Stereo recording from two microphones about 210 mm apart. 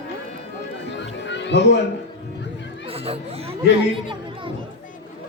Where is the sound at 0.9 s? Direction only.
60° left (ahead or behind).